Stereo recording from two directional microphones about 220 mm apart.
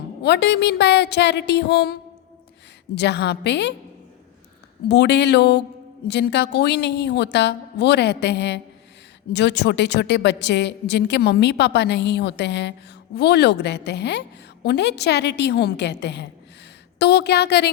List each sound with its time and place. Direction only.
0.2 s a woman's voice: 50° left (ahead or behind)
4.9 s a woman's voice: 50° left (ahead or behind)